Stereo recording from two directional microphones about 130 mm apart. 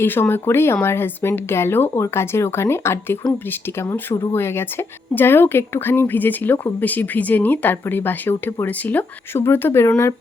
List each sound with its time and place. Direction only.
0.0 s a woman's voice: 15° left (ahead or behind)